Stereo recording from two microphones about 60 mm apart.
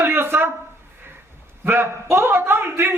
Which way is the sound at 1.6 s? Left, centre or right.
Right.